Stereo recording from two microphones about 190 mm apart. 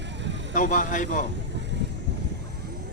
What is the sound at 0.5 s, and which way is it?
Speech, 45° left (ahead or behind).